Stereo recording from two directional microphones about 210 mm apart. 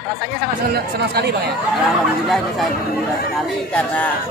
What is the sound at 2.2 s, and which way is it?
Speech, centre (ahead or behind).